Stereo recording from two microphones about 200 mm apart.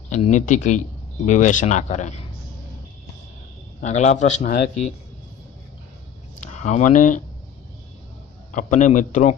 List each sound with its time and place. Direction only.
0.1 s speech: 35° left (ahead or behind)
3.8 s speech: 35° left (ahead or behind)
6.5 s speech: 35° left (ahead or behind)
8.5 s speech: 40° left (ahead or behind)